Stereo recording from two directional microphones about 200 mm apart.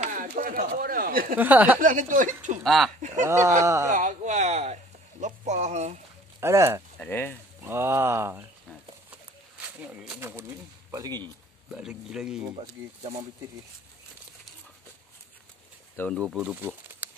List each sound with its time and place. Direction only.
0.0 s a sound: 40° right (ahead or behind)
0.4 s speech: 45° right (ahead or behind)
1.3 s speech: 10° right (ahead or behind)
1.8 s speech: 40° right (ahead or behind)
2.6 s speech: centre (ahead or behind)
3.3 s speech: 15° right (ahead or behind)
3.9 s speech: 40° right (ahead or behind)
6.4 s speech: 15° right (ahead or behind)
7.0 s speech: 10° left (ahead or behind)
7.6 s speech: 15° right (ahead or behind)
9.8 s speech: 5° right (ahead or behind)
11.7 s speech: 5° right (ahead or behind)
12.4 s speech: 25° right (ahead or behind)
16.0 s speech: 5° left (ahead or behind)